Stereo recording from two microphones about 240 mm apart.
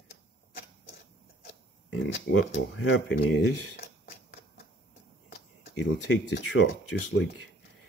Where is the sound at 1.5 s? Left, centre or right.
Left.